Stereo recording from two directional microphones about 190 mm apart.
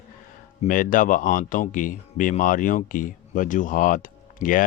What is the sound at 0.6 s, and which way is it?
Speech, 45° left (ahead or behind).